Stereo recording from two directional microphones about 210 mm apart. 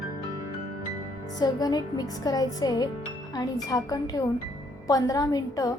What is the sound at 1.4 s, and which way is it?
A woman's voice, 20° left (ahead or behind).